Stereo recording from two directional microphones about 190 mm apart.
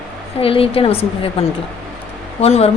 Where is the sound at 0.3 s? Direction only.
30° left (ahead or behind).